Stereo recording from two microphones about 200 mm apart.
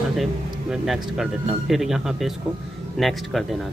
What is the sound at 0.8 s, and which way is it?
A man's voice, centre (ahead or behind).